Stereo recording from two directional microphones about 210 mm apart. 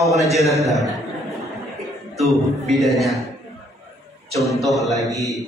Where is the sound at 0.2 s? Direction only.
Centre (ahead or behind).